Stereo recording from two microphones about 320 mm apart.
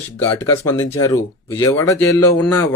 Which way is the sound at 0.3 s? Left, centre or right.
Centre.